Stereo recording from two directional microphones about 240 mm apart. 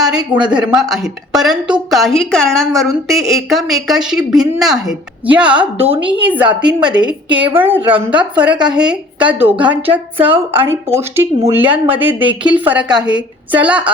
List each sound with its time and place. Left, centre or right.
0.2 s a woman's voice: centre
0.5 s a woman's voice: centre
5.7 s a woman's voice: right
7.6 s a woman's voice: centre